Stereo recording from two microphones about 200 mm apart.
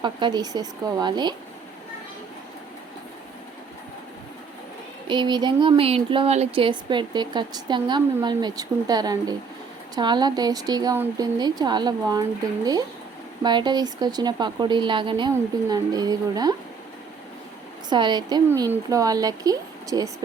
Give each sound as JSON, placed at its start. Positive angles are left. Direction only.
{"t": 0.0, "sound": "speech", "side_deg": -20}
{"t": 5.0, "sound": "speech", "side_deg": -20}
{"t": 13.4, "sound": "speech", "side_deg": -20}
{"t": 17.8, "sound": "speech", "side_deg": -20}